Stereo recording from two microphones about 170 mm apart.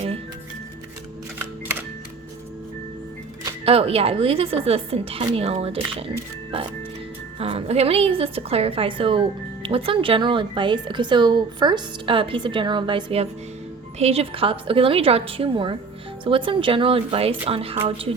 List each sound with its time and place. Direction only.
3.7 s a woman's voice: 35° right (ahead or behind)
7.3 s a woman's voice: 35° right (ahead or behind)